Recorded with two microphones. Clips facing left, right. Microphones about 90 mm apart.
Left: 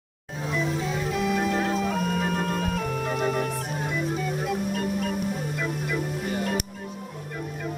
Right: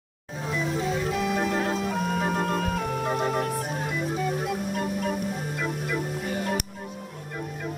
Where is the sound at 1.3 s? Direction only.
30° right (ahead or behind).